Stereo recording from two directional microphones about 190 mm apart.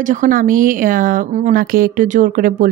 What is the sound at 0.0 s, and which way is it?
Speech, 40° right (ahead or behind).